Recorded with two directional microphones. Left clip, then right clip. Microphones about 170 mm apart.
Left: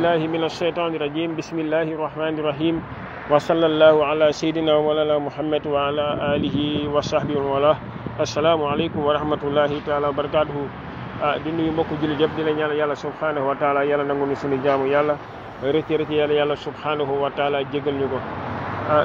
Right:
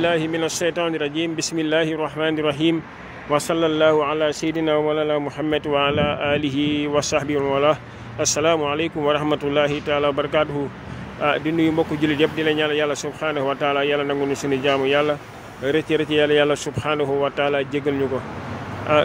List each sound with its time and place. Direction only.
0.0 s speech: 20° right (ahead or behind)
3.3 s speech: 20° right (ahead or behind)
5.7 s speech: 30° right (ahead or behind)
11.2 s speech: 35° right (ahead or behind)
15.6 s speech: 25° right (ahead or behind)